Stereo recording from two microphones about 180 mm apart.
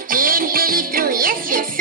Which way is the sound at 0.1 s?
50° right (ahead or behind).